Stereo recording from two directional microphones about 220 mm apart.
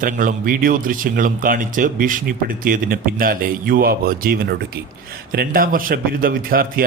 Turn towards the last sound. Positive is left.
turn(degrees=-40)  # may be behind; listen again after turning